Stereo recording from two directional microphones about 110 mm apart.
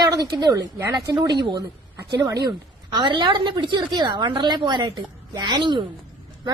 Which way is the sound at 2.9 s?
45° right (ahead or behind).